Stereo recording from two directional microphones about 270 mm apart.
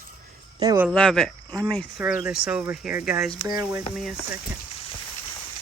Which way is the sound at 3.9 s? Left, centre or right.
Centre.